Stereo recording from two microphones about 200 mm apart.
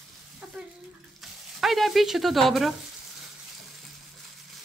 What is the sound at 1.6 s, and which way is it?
Speech, centre (ahead or behind).